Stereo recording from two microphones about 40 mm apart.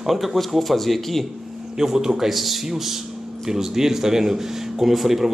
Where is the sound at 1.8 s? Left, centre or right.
Centre.